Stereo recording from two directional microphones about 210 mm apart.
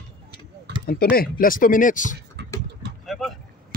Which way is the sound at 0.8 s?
45° left (ahead or behind).